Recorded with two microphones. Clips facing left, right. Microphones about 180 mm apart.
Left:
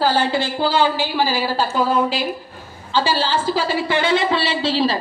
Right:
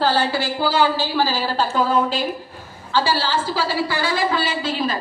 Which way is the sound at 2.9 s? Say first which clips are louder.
Left 1 dB; 20° left (ahead or behind).